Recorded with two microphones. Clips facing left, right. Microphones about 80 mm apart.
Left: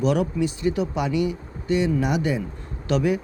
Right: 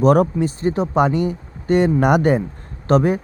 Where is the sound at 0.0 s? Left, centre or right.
Right.